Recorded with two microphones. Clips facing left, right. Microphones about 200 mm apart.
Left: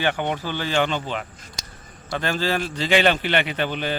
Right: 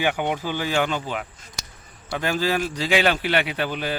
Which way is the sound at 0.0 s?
10° right (ahead or behind).